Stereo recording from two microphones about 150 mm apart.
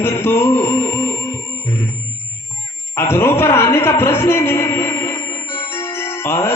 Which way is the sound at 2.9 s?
15° left (ahead or behind).